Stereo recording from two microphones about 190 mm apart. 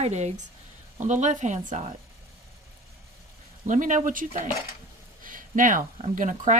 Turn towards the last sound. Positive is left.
turn(degrees=-40)  # may be behind; listen again after turning